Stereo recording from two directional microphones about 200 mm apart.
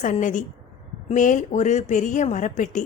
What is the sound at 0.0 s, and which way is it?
Speech, 40° left (ahead or behind).